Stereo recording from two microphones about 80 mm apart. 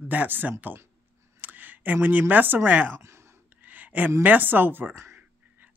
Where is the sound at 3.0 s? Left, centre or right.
Right.